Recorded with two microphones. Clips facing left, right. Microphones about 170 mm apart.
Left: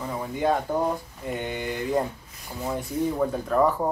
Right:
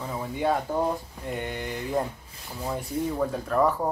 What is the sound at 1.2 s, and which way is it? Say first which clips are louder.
Speech: left 3 dB; centre (ahead or behind).